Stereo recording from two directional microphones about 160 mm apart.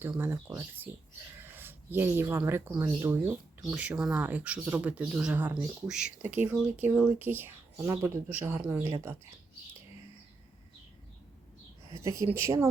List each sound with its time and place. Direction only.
0.0 s speech: 15° right (ahead or behind)
3.7 s speech: 10° right (ahead or behind)
12.0 s speech: 15° right (ahead or behind)